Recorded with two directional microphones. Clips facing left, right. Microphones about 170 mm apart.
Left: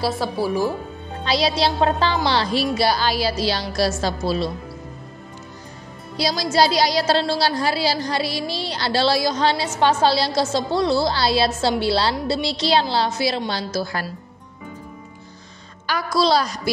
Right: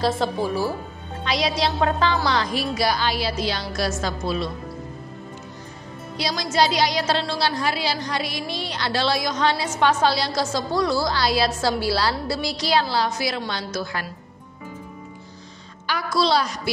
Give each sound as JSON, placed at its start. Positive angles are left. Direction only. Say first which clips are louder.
{"t": 0.0, "sound": "speech", "louder": "even", "side_deg": 10}
{"t": 1.2, "sound": "a woman's voice", "louder": "left 3 dB", "side_deg": 30}
{"t": 6.1, "sound": "a woman's voice", "louder": "left 3 dB", "side_deg": 35}
{"t": 15.9, "sound": "a woman's voice", "louder": "left 2 dB", "side_deg": 40}